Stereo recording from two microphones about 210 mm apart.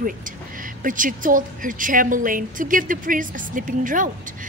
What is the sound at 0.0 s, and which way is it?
Speech, 40° right (ahead or behind).